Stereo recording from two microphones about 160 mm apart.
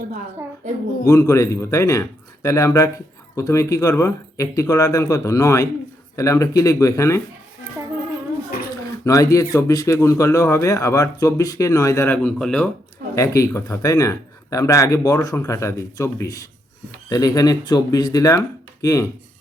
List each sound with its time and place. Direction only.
1.0 s speech: 20° left (ahead or behind)
9.0 s speech: 20° left (ahead or behind)
13.1 s speech: 20° left (ahead or behind)